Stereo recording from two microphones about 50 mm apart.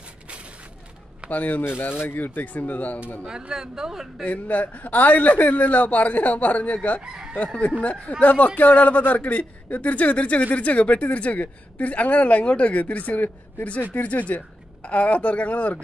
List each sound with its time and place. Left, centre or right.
1.3 s a man's voice: left
1.8 s a man's voice: left
3.3 s speech: centre
4.3 s a man's voice: left
7.0 s speech: centre
7.8 s a woman's voice: left